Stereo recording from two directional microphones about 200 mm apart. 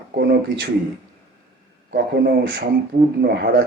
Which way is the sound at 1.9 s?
55° right (ahead or behind).